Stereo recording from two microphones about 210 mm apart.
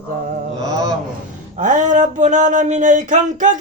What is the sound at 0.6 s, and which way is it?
Speech, 15° right (ahead or behind).